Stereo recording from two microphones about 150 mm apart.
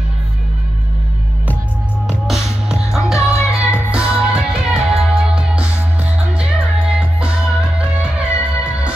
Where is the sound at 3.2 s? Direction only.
20° left (ahead or behind).